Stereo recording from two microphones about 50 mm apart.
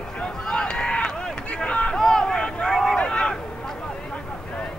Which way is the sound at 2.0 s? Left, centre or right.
Centre.